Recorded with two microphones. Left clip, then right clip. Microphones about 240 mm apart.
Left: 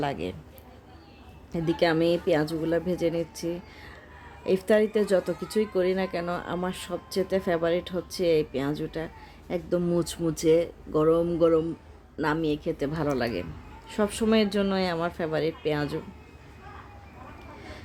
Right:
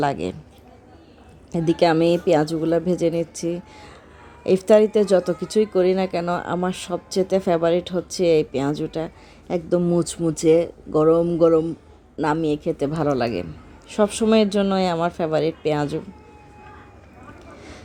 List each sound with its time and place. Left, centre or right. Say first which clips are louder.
0.0 s a man's voice: right 7 dB; right
1.5 s a woman's voice: right 6 dB; centre
17.6 s a sound: right 2 dB; centre